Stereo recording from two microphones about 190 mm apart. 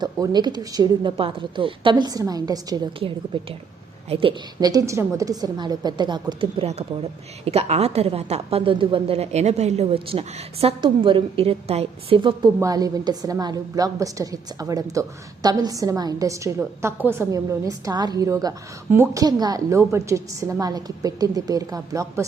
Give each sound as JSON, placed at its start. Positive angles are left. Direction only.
{"t": 0.0, "sound": "a woman's voice", "side_deg": -20}
{"t": 4.1, "sound": "a woman's voice", "side_deg": -30}